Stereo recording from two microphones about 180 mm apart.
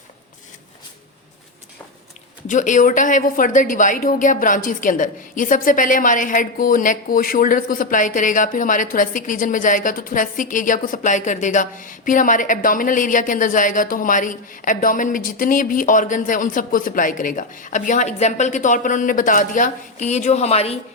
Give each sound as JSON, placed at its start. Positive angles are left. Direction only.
{"t": 2.5, "sound": "a woman's voice", "side_deg": 45}